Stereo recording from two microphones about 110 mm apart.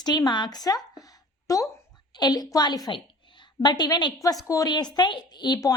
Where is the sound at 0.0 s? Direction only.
40° left (ahead or behind).